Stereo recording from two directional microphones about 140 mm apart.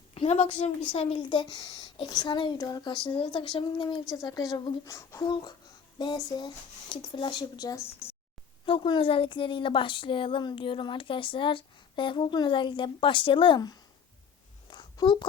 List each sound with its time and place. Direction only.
0.1 s a woman's voice: 50° left (ahead or behind); by 7.9 s 25° left (ahead or behind)
8.6 s a woman's voice: 40° left (ahead or behind)
14.7 s a sound: 35° left (ahead or behind)